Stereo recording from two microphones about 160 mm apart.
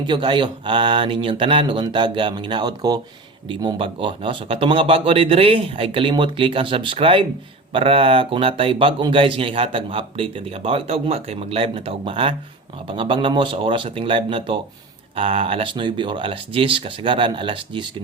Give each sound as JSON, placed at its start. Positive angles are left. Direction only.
{"t": 0.1, "sound": "speech", "side_deg": -30}